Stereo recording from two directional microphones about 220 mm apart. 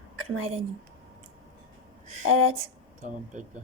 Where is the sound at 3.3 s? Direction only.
35° right (ahead or behind).